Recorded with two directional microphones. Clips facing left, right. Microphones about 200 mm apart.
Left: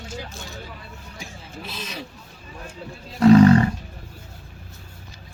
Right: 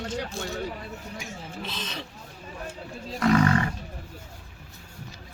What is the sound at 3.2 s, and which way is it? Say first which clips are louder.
Speech: left 9 dB; 30° left (ahead or behind).